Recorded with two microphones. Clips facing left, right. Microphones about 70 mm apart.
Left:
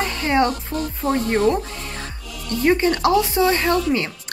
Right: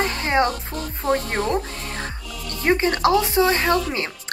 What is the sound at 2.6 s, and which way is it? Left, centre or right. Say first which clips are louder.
Speech: left 1 dB; right.